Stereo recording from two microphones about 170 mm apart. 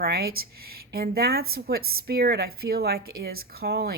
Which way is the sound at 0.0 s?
65° right (ahead or behind).